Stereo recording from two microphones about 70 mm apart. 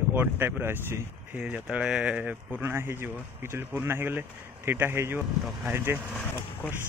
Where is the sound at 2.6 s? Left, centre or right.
Right.